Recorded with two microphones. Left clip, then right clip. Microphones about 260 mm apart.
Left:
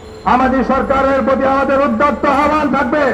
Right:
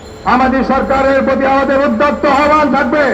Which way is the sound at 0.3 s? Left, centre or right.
Left.